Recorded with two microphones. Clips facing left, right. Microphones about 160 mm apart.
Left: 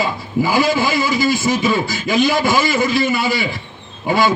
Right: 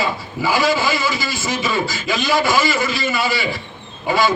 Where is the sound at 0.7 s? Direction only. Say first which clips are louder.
Left 2 dB; 55° left (ahead or behind).